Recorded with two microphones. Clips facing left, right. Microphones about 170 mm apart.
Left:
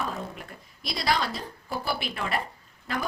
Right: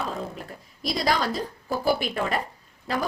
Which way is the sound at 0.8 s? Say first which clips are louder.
Right 3 dB; 40° right (ahead or behind).